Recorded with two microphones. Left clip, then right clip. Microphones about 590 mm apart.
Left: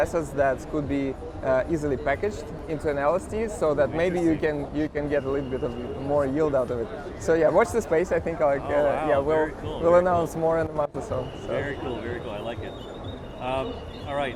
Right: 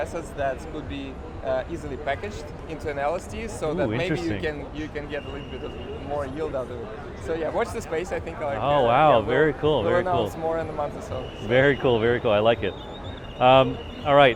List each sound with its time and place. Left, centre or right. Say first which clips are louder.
0.0 s speech: left 5 dB; left
8.6 s speech: right 5 dB; right
9.9 s speech: left 3 dB; left
11.5 s speech: right 11 dB; right